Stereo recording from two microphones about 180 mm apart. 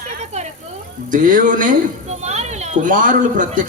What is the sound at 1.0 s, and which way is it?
Speech, 45° right (ahead or behind).